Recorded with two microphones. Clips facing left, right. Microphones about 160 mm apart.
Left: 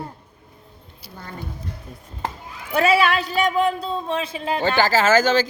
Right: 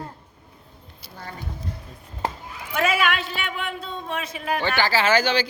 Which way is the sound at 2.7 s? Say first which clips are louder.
Left 5 dB; 35° left (ahead or behind).